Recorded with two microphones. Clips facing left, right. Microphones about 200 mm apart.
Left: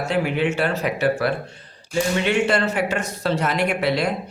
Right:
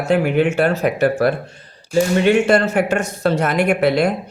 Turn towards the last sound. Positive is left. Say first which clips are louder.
# right 6 dB
turn(degrees=-50)  # may be behind; listen again after turning